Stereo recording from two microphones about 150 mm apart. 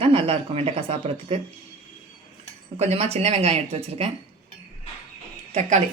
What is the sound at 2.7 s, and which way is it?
Speech, 45° right (ahead or behind).